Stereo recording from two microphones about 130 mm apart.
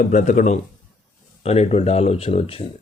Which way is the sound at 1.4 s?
55° left (ahead or behind).